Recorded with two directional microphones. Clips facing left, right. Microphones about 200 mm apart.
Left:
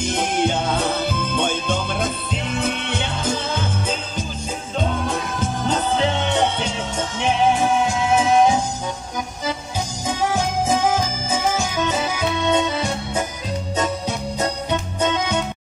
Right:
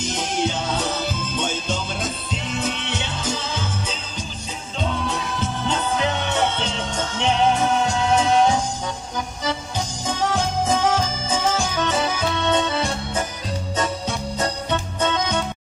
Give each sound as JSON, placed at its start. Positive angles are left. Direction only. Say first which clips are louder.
{"t": 0.0, "sound": "music", "louder": "left 3 dB", "side_deg": 55}
{"t": 6.0, "sound": "music", "louder": "left 3 dB", "side_deg": 20}
{"t": 6.6, "sound": "music", "louder": "left 1 dB", "side_deg": 10}
{"t": 10.3, "sound": "music", "louder": "left 1 dB", "side_deg": 10}